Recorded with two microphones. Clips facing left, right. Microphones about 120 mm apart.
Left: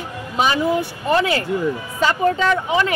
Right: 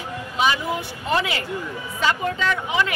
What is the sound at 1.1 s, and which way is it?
Speech, 40° left (ahead or behind).